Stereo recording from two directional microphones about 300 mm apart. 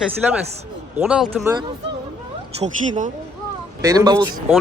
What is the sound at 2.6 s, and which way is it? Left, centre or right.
Speech, right.